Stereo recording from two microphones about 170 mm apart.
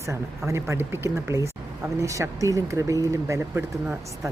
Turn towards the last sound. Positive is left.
turn(degrees=-15)  # may be behind; listen again after turning